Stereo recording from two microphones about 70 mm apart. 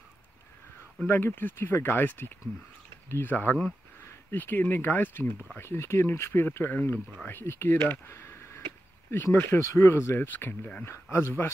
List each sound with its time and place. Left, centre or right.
1.0 s speech: left
6.7 s speech: left